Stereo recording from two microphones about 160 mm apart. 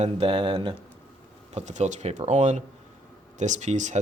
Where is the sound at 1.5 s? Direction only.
50° right (ahead or behind).